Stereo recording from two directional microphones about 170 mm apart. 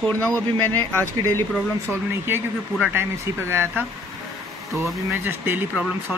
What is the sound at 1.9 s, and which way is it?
Speech, 15° right (ahead or behind).